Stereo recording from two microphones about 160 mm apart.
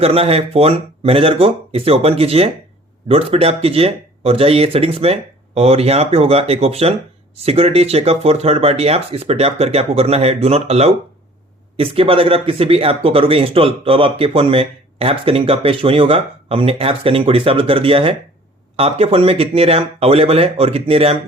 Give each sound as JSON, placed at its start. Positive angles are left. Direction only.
{"t": 0.0, "sound": "speech", "side_deg": -40}